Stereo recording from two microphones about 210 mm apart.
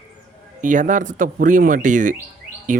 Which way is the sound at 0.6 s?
35° right (ahead or behind).